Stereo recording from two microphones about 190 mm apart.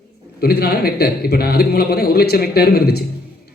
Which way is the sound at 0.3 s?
55° left (ahead or behind).